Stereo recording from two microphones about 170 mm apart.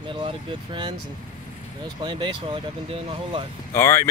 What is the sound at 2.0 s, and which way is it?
Speech, 25° right (ahead or behind).